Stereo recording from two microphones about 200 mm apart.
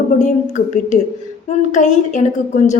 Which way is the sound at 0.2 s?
35° left (ahead or behind).